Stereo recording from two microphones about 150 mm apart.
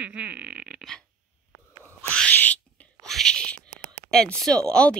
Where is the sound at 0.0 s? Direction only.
10° right (ahead or behind).